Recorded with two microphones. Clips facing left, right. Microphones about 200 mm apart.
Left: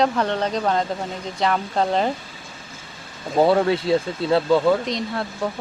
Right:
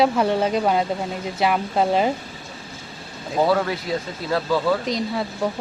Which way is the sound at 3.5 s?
25° left (ahead or behind).